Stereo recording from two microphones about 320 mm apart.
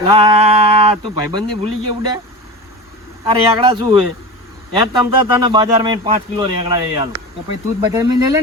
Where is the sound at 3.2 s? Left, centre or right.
Centre.